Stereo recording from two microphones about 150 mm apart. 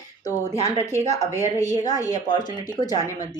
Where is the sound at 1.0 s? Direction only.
45° right (ahead or behind).